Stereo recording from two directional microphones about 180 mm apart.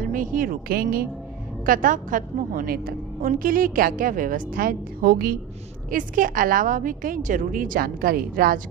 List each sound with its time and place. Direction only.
0.0 s a woman's voice: 50° right (ahead or behind)